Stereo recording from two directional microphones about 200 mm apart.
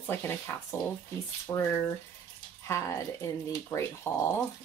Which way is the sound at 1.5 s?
15° left (ahead or behind).